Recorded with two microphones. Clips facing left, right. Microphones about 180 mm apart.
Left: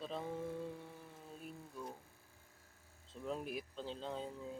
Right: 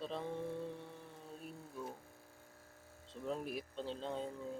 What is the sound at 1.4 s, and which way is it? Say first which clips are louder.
Speech: right 1 dB; 5° right (ahead or behind).